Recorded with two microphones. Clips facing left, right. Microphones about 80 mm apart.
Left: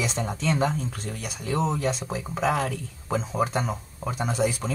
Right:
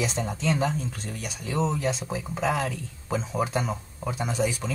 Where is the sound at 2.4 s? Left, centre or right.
Left.